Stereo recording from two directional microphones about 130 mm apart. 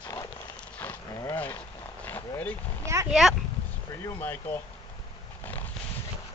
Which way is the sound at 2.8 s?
20° right (ahead or behind).